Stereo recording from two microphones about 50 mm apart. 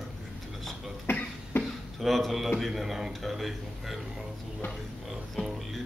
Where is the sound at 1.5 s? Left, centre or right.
Left.